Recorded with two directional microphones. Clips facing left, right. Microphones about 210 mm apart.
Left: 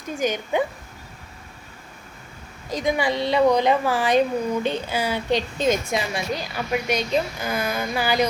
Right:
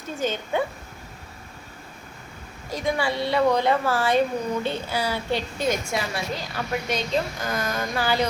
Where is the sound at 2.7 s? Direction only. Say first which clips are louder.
Left 3 dB; 15° left (ahead or behind).